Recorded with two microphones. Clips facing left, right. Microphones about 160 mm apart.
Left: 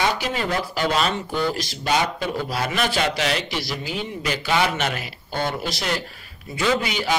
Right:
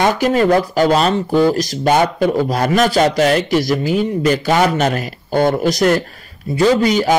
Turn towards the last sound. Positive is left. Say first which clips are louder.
# right 10 dB
turn(degrees=-40)  # may be behind; listen again after turning